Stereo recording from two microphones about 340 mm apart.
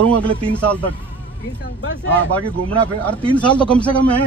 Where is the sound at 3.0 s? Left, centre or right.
Centre.